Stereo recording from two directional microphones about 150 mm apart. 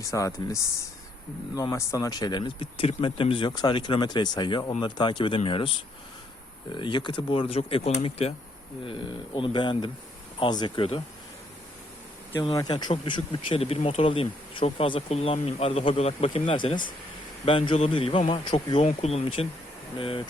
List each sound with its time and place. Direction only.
0.0 s speech: 20° left (ahead or behind); by 11.0 s 40° left (ahead or behind)
12.4 s speech: 30° left (ahead or behind)
18.8 s speech: 45° left (ahead or behind)